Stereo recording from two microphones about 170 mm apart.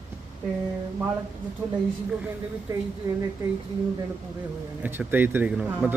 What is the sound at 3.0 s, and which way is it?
Speech, 20° right (ahead or behind).